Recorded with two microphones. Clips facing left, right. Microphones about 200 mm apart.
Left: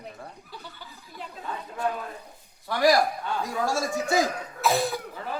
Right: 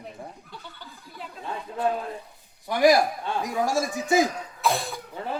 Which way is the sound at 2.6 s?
15° right (ahead or behind).